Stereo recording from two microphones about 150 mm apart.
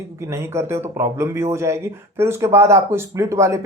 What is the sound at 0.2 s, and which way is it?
Speech, 20° right (ahead or behind).